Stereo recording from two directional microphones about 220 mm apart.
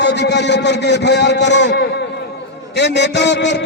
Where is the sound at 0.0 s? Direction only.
50° left (ahead or behind).